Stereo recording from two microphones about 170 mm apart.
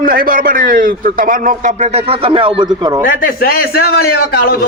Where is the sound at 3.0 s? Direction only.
60° left (ahead or behind).